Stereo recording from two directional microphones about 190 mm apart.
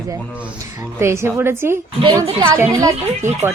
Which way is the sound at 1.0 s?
15° right (ahead or behind).